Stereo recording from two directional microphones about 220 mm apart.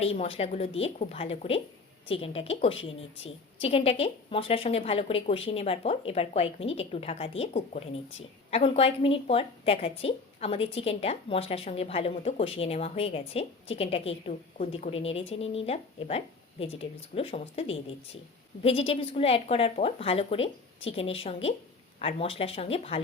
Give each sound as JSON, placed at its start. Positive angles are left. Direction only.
{"t": 0.0, "sound": "a woman's voice", "side_deg": 25}